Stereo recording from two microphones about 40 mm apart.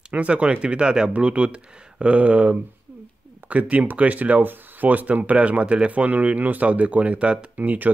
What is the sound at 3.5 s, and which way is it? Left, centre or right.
Speech, right.